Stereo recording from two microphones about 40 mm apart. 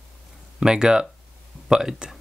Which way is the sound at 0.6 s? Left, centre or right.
Centre.